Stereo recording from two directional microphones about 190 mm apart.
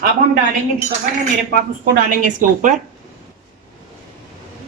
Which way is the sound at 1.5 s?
50° right (ahead or behind).